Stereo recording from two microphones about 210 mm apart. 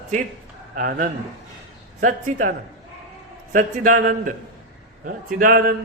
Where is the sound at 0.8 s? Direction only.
40° right (ahead or behind).